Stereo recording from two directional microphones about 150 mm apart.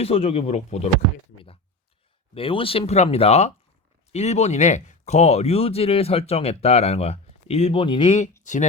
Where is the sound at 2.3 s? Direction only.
40° left (ahead or behind).